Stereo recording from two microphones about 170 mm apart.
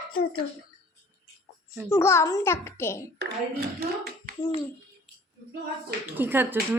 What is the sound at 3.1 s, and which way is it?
A child's voice, 75° right (ahead or behind).